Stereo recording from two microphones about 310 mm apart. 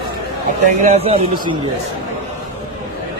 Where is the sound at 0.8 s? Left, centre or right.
Centre.